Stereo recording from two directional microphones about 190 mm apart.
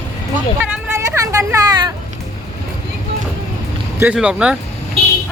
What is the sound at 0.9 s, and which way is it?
Vehicle, 15° right (ahead or behind).